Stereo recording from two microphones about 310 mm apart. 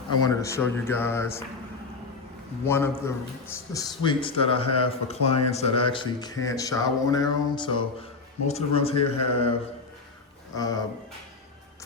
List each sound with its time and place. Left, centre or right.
0.1 s speech: centre
2.6 s speech: centre
10.5 s speech: centre